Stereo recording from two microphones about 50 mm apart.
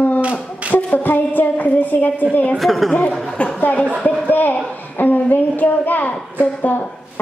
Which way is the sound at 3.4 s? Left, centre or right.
Left.